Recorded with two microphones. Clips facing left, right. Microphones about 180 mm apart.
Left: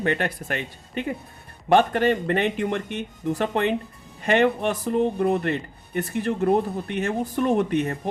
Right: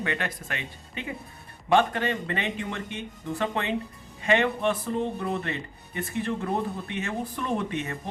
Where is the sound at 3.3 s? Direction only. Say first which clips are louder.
Left 5 dB; 40° left (ahead or behind).